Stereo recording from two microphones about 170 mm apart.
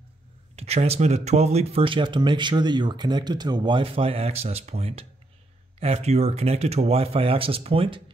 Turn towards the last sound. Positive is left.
turn(degrees=-30)  # may be behind; listen again after turning